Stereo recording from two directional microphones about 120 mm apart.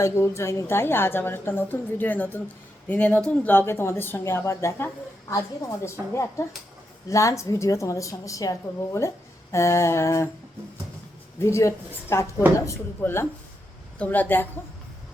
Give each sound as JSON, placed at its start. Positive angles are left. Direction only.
{"t": 0.0, "sound": "a woman's voice", "side_deg": 20}
{"t": 11.3, "sound": "a woman's voice", "side_deg": 25}